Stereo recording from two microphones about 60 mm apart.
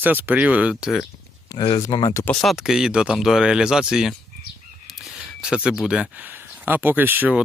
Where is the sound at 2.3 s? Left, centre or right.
Centre.